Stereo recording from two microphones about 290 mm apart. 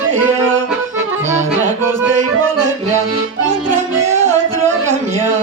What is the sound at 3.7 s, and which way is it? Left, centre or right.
Music, right.